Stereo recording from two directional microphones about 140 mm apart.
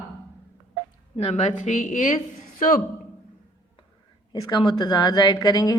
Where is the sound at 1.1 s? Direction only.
45° left (ahead or behind); by 2.8 s 70° left (ahead or behind).